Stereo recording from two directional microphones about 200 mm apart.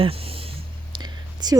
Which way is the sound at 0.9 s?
20° right (ahead or behind).